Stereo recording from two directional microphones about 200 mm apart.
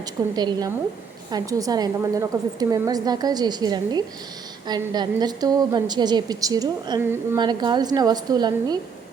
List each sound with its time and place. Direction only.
0.0 s a woman's voice: 20° right (ahead or behind)